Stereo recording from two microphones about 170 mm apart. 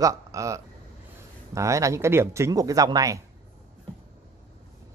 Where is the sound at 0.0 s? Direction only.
20° right (ahead or behind).